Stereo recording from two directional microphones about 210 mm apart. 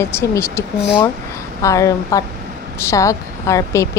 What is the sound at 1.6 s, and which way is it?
Speech, 15° left (ahead or behind).